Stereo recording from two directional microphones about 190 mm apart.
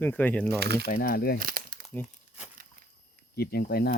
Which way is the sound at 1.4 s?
50° right (ahead or behind).